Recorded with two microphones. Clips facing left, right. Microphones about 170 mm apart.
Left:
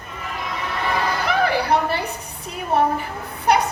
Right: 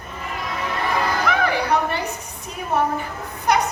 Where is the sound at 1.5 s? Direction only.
30° left (ahead or behind).